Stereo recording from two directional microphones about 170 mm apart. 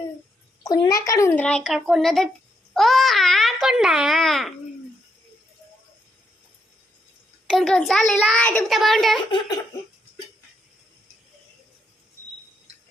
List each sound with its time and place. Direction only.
0.6 s a child's voice: 25° left (ahead or behind); by 4.5 s centre (ahead or behind)
7.4 s a child's voice: centre (ahead or behind)